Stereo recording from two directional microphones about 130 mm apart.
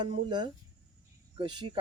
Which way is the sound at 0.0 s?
35° right (ahead or behind).